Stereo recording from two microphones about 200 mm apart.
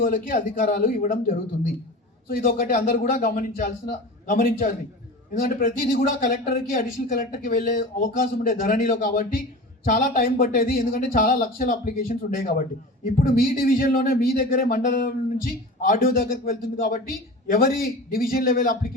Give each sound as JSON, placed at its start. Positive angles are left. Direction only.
{"t": 0.0, "sound": "a man's voice", "side_deg": 45}